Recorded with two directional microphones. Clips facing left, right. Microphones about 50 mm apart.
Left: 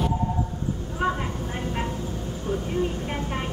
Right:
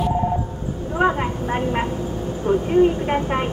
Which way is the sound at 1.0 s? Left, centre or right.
Right.